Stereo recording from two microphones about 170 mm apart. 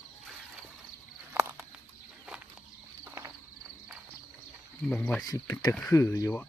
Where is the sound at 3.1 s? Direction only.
15° right (ahead or behind).